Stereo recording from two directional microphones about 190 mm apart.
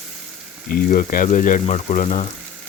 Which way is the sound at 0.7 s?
45° left (ahead or behind).